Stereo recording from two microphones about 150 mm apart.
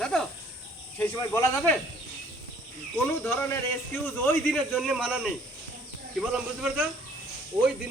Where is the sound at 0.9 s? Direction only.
15° left (ahead or behind).